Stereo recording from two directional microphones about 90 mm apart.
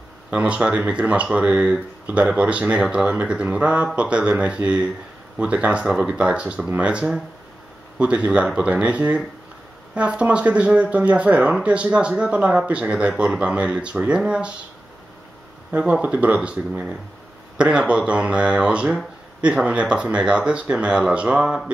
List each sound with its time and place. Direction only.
0.3 s speech: 15° right (ahead or behind)
15.7 s speech: 10° right (ahead or behind)